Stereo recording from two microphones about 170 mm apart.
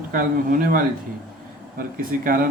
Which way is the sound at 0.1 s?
55° right (ahead or behind).